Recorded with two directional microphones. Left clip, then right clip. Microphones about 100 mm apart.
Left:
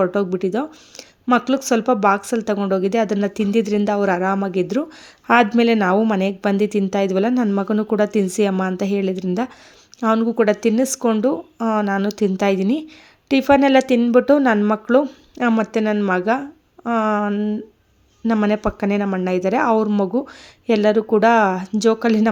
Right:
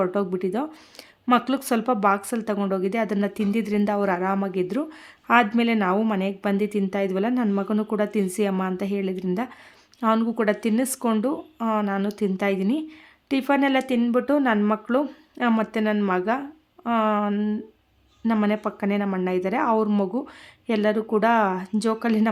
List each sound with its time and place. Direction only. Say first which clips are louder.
0.0 s a woman's voice: left 5 dB; 30° left (ahead or behind)
18.4 s a woman's voice: left 5 dB; 45° left (ahead or behind)